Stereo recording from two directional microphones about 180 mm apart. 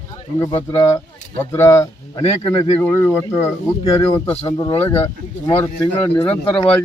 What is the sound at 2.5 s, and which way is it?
Speech, 30° left (ahead or behind).